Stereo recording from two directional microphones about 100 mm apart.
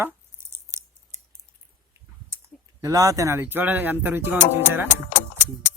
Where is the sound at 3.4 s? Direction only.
20° right (ahead or behind).